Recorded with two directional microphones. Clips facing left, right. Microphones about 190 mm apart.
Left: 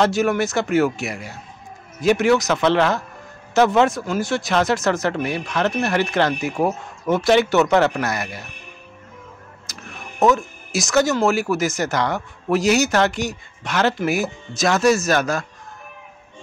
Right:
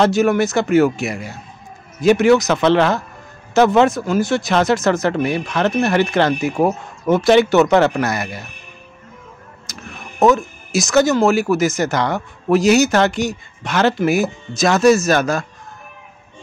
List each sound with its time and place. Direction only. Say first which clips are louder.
0.0 s speech: right 4 dB; 20° right (ahead or behind)
2.0 s speech: right 4 dB; 20° right (ahead or behind)
9.7 s music: right 4 dB; 20° right (ahead or behind)
10.3 s speech: right 4 dB; 20° right (ahead or behind)